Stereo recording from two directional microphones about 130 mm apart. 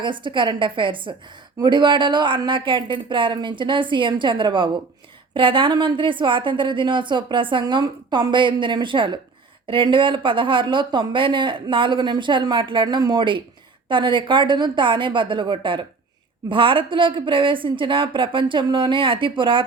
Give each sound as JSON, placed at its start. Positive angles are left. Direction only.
{"t": 0.0, "sound": "speech", "side_deg": -40}